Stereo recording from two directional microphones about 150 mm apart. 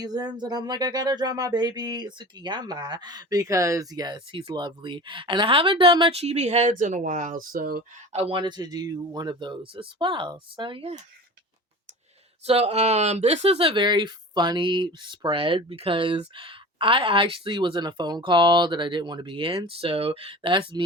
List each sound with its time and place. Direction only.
0.0 s speech: 25° right (ahead or behind); by 7.9 s 80° right
8.1 s speech: 40° right (ahead or behind)
12.5 s speech: 45° right (ahead or behind)